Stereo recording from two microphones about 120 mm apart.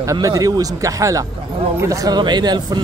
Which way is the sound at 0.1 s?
30° right (ahead or behind).